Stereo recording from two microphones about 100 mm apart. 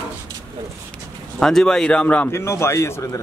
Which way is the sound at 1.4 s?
5° left (ahead or behind).